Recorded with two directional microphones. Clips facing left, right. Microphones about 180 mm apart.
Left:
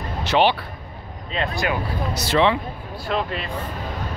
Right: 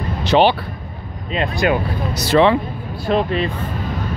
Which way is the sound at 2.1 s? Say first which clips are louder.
Right 6 dB; 45° right (ahead or behind).